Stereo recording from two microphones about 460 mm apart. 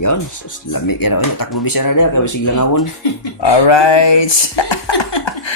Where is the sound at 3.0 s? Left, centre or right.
Left.